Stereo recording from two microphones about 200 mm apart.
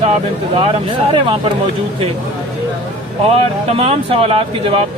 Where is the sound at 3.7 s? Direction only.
30° right (ahead or behind).